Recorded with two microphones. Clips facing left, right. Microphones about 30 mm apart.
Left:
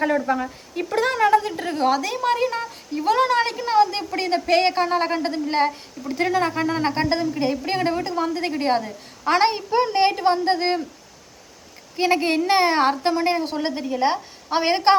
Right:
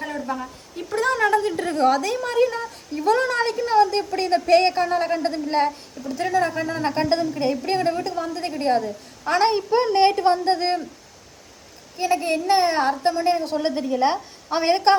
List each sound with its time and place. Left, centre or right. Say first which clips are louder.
0.0 s speech: left 7 dB; left
1.2 s a woman's voice: left 2 dB; centre
3.1 s a woman's voice: left 1 dB; centre
5.2 s a woman's voice: even; centre
6.1 s speech: left 1 dB; left
7.0 s a woman's voice: even; centre; by 9.5 s left
9.5 s a woman's voice: right 2 dB; centre
11.9 s speech: left 2 dB; left
12.5 s a child's voice: even; left; by 14.9 s centre